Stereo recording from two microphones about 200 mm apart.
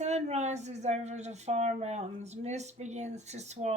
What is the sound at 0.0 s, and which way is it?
Speech, 35° right (ahead or behind).